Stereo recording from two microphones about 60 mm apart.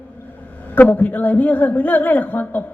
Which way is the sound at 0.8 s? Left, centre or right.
Left.